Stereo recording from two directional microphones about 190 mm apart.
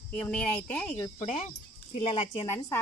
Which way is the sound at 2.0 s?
30° left (ahead or behind).